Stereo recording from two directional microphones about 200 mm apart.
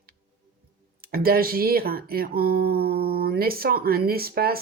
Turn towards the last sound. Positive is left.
turn(degrees=-50)  # may be behind; listen again after turning